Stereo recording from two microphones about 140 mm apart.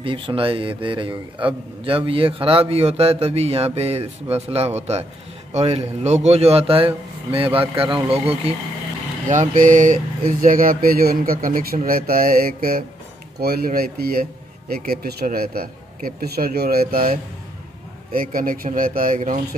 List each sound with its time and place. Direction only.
0.0 s a man's voice: 40° right (ahead or behind)
9.3 s speech: 65° right (ahead or behind); by 17.2 s 90° right
18.1 s speech: 80° right